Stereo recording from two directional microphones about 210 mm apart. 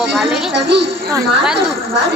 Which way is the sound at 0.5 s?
55° right (ahead or behind).